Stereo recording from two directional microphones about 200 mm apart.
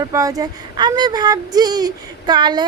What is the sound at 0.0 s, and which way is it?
Speech, 15° right (ahead or behind).